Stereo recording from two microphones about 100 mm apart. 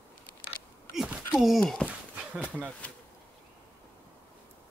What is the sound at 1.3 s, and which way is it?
Speech, centre (ahead or behind).